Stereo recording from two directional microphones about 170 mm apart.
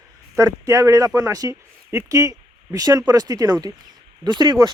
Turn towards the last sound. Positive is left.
turn(degrees=-25)  # may be behind; listen again after turning